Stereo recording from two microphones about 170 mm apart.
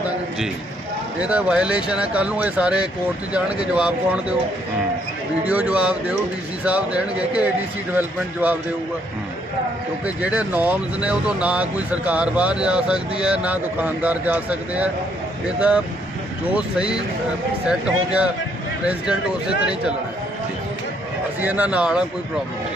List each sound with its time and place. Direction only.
1.2 s speech: 5° right (ahead or behind)
5.5 s speech: 5° right (ahead or behind)
10.2 s speech: 10° right (ahead or behind)
16.6 s speech: 5° right (ahead or behind)
21.4 s speech: 10° right (ahead or behind)